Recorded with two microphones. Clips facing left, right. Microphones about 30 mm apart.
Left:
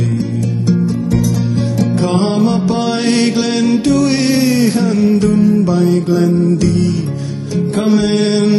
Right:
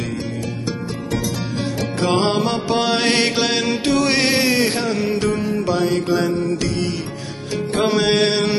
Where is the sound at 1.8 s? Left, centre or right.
Right.